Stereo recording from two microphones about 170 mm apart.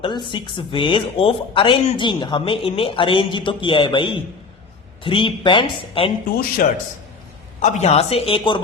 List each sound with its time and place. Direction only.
0.0 s a woman's voice: 30° left (ahead or behind)
6.6 s a man's voice: 55° left (ahead or behind)
7.6 s a woman's voice: 40° left (ahead or behind)